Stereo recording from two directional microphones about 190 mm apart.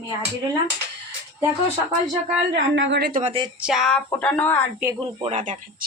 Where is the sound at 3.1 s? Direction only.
40° right (ahead or behind).